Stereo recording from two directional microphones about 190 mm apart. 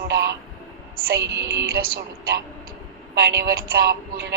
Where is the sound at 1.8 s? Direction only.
55° right (ahead or behind).